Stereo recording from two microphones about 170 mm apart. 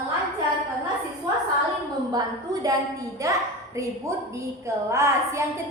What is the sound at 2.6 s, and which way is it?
Speech, 20° right (ahead or behind).